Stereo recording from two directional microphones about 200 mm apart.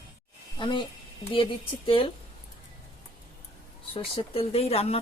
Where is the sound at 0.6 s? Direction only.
25° left (ahead or behind).